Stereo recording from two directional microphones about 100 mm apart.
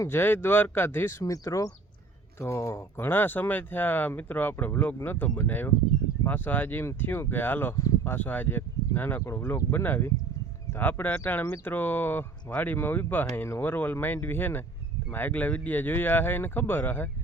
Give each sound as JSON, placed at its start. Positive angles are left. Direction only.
{"t": 0.0, "sound": "speech", "side_deg": 20}
{"t": 1.2, "sound": "speech", "side_deg": 35}
{"t": 7.8, "sound": "a sound", "side_deg": 30}
{"t": 8.1, "sound": "speech", "side_deg": 15}